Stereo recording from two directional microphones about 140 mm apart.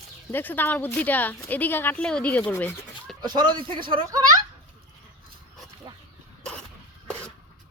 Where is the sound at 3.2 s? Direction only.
30° right (ahead or behind).